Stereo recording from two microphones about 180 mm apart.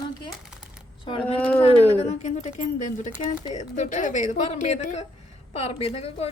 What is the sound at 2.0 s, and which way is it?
A woman's voice, 40° left (ahead or behind).